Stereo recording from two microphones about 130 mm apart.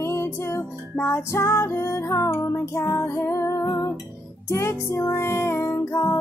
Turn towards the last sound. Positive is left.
turn(degrees=20)  # may be behind; listen again after turning